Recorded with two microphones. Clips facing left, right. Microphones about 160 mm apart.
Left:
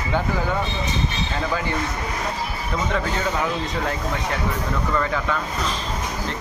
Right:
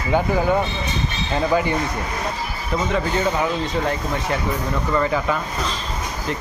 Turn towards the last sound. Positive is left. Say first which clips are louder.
# right 3 dB
turn(degrees=-10)  # may be behind; listen again after turning